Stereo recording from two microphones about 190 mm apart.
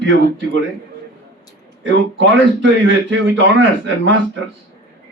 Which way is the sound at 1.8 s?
75° right (ahead or behind).